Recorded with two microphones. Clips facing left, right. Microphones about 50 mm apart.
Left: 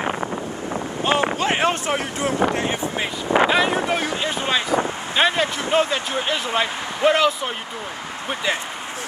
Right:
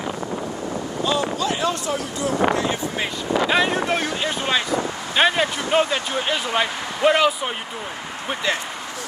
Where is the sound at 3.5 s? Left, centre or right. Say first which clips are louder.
Even; centre.